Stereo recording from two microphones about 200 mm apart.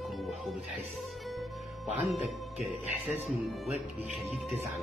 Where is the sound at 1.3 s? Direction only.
Centre (ahead or behind).